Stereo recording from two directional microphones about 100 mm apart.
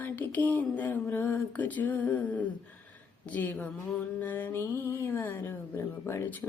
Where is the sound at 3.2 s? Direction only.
15° left (ahead or behind).